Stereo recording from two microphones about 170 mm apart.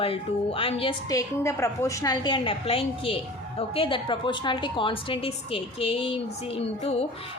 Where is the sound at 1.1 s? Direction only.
15° left (ahead or behind); by 6.1 s 35° left (ahead or behind).